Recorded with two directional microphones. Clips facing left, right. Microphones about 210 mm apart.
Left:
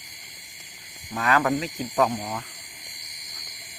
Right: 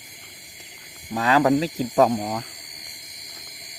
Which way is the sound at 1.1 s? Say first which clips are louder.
Right 5 dB; 30° right (ahead or behind).